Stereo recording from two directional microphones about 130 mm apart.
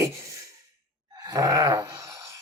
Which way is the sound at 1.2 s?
30° right (ahead or behind).